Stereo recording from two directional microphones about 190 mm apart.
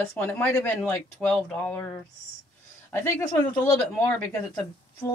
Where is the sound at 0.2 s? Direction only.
10° left (ahead or behind).